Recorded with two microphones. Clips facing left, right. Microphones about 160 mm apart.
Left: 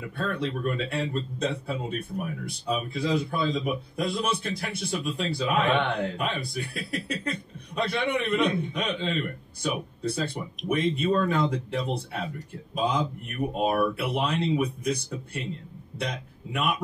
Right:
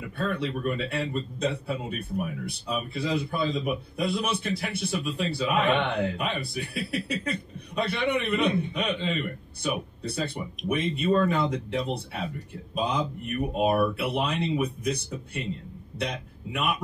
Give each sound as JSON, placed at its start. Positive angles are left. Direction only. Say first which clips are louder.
{"t": 0.2, "sound": "a man's voice", "louder": "even", "side_deg": -5}
{"t": 16.0, "sound": "a man's voice", "louder": "right 1 dB", "side_deg": 0}